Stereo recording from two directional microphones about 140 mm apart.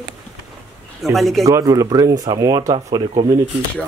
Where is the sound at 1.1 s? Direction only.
Centre (ahead or behind).